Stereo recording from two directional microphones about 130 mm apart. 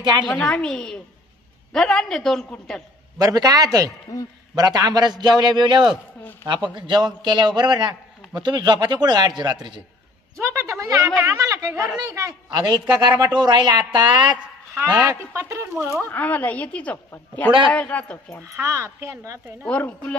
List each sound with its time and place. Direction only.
0.0 s a woman's voice: 35° right (ahead or behind)
0.3 s a woman's voice: 5° left (ahead or behind)
3.2 s speech: 30° right (ahead or behind)
4.1 s a man's voice: 30° left (ahead or behind)
4.6 s a man's voice: 30° right (ahead or behind)
10.3 s a man's voice: 20° right (ahead or behind)
14.8 s speech: 20° right (ahead or behind)
16.1 s a woman's voice: 15° left (ahead or behind)
18.4 s speech: 20° right (ahead or behind)
19.6 s a woman's voice: 10° left (ahead or behind)